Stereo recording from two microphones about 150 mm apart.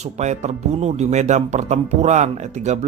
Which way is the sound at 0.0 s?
50° right (ahead or behind).